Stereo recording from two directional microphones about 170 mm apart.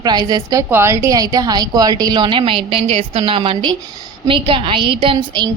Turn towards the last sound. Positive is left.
turn(degrees=-30)  # may be behind; listen again after turning